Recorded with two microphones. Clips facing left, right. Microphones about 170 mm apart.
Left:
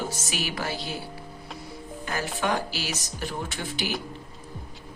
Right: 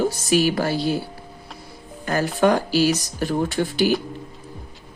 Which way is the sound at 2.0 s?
50° right (ahead or behind).